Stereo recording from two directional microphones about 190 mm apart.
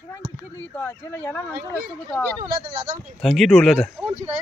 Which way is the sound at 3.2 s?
Centre (ahead or behind).